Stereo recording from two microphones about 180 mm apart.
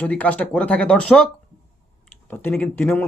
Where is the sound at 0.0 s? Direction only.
10° left (ahead or behind).